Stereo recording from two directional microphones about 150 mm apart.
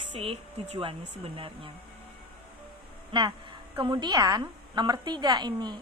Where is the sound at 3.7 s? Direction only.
30° right (ahead or behind).